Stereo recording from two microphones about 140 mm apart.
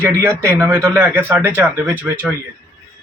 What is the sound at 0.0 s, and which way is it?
A man's voice, 15° right (ahead or behind).